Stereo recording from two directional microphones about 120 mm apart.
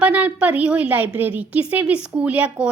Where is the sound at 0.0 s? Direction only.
10° right (ahead or behind).